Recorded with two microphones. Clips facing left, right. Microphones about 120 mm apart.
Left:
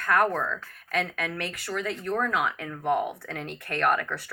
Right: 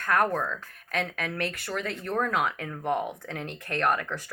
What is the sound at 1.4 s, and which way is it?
Speech, 55° right (ahead or behind).